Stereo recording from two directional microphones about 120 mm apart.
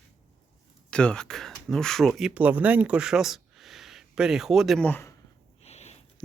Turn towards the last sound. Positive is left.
turn(degrees=15)  # may be behind; listen again after turning